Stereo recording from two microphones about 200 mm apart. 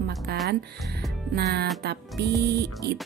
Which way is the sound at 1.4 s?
55° right (ahead or behind).